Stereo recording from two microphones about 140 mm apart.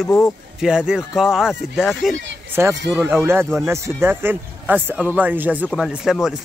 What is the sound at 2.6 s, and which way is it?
Speech, 15° right (ahead or behind).